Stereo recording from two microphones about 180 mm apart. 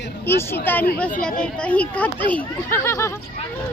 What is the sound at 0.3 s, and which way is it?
Speech, 10° left (ahead or behind).